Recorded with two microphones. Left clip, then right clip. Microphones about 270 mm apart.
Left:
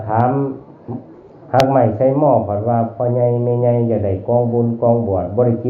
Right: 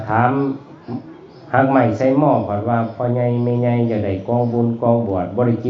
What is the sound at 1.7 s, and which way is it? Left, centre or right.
Speech, right.